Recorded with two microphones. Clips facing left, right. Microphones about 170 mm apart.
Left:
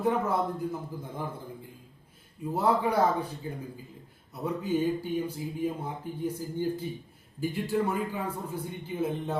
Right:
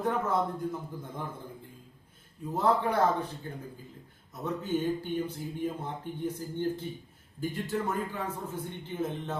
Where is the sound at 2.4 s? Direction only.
10° left (ahead or behind).